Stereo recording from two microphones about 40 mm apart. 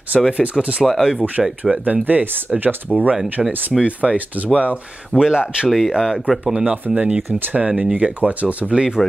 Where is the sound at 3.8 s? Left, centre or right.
Right.